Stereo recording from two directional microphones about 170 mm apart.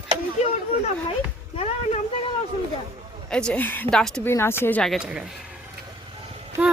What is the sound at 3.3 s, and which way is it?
Speech, 5° left (ahead or behind).